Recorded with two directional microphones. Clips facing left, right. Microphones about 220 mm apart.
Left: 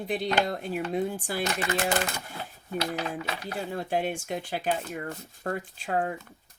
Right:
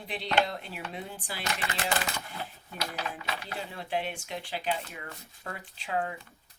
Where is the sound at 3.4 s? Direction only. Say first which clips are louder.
Left 6 dB; 45° left (ahead or behind).